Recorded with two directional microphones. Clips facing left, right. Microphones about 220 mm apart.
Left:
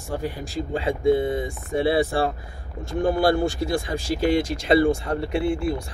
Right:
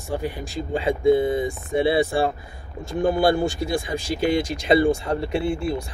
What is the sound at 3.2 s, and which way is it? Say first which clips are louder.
Speech: even; 20° right (ahead or behind).